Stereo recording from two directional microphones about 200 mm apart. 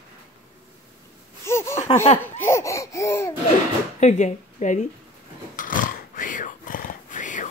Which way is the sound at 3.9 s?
35° left (ahead or behind).